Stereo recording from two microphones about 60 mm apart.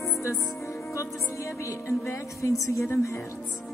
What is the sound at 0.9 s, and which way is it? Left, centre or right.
Music, left.